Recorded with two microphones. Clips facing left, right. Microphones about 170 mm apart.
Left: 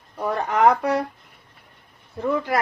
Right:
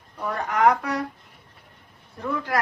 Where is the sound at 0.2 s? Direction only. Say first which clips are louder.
Left 3 dB; 25° left (ahead or behind).